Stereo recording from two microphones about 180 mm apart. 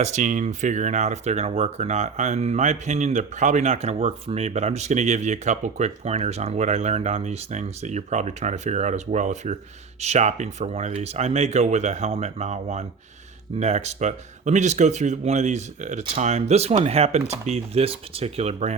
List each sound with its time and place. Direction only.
0.0 s speech: 40° right (ahead or behind)